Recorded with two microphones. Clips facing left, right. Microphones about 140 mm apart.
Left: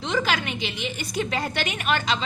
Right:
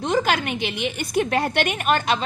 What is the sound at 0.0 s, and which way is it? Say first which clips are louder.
A woman's voice: right 4 dB; 50° right (ahead or behind).